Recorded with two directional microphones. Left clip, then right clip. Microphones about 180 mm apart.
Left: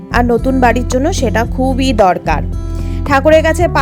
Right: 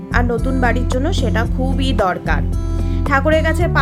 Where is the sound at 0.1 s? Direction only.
45° left (ahead or behind).